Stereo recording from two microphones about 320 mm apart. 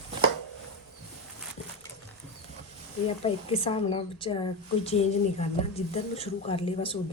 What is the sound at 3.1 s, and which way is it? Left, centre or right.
A woman's voice, centre.